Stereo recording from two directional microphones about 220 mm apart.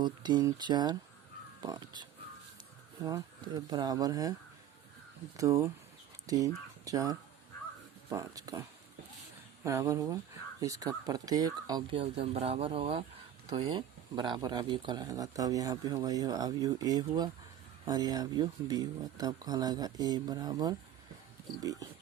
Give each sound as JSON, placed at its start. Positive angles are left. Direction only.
{"t": 0.0, "sound": "speech", "side_deg": -20}
{"t": 5.4, "sound": "speech", "side_deg": -15}
{"t": 9.6, "sound": "speech", "side_deg": -15}